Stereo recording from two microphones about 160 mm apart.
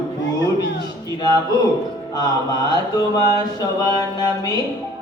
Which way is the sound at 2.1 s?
25° left (ahead or behind).